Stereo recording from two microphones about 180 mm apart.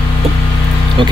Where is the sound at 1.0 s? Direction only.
25° right (ahead or behind).